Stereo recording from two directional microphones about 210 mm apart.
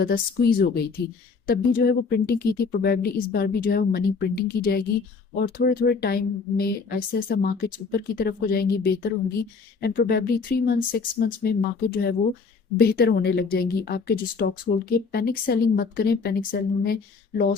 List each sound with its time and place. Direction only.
0.0 s speech: 45° left (ahead or behind)